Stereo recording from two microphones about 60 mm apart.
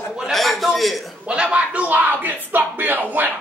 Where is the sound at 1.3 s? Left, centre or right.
Centre.